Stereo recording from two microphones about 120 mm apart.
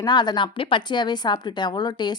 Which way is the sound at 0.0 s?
35° left (ahead or behind).